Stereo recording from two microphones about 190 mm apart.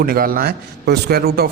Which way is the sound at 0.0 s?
50° right (ahead or behind).